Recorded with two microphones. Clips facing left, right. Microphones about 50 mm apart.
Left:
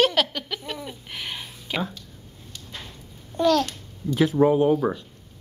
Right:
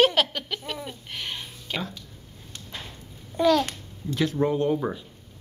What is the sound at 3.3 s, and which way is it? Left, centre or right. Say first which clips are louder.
Babbling: even; centre.